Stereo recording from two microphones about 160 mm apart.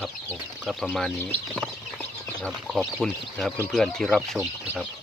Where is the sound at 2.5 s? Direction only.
Centre (ahead or behind).